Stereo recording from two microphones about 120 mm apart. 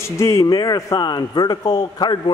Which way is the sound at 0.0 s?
25° left (ahead or behind).